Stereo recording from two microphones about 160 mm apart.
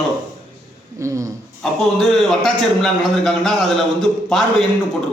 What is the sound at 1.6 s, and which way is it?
A man's voice, centre (ahead or behind).